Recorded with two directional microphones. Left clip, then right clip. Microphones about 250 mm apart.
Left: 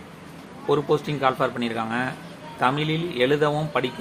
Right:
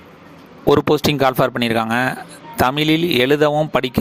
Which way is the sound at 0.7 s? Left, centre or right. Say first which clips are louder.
Right 8 dB; right.